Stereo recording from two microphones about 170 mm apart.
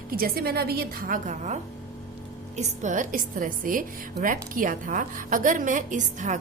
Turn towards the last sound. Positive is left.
turn(degrees=-45)  # may be behind; listen again after turning